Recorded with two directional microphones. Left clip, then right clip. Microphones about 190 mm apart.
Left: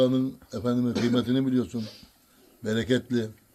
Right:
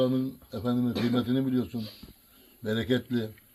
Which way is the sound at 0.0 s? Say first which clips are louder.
Left 4 dB; 10° left (ahead or behind).